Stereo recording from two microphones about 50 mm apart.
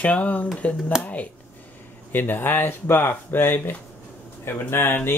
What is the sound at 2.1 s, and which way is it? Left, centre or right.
Speech, left.